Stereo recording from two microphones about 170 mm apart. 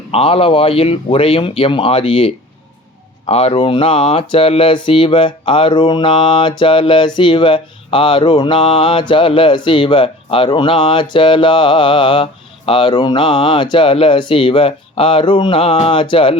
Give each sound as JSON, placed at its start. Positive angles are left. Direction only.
{"t": 0.1, "sound": "speech", "side_deg": 35}